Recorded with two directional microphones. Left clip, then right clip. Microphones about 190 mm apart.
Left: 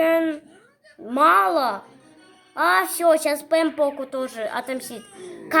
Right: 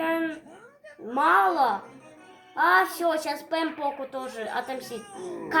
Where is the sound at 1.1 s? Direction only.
50° left (ahead or behind).